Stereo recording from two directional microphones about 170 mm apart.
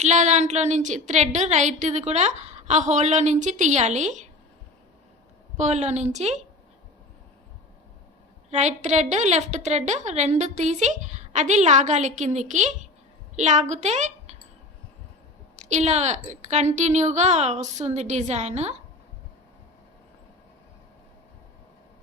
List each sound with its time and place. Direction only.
0.0 s a woman's voice: 45° right (ahead or behind)
5.5 s a woman's voice: 40° right (ahead or behind)
8.4 s a woman's voice: 40° right (ahead or behind)
15.5 s a woman's voice: 40° right (ahead or behind)